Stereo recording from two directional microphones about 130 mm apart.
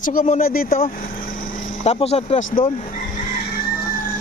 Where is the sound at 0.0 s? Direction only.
90° left.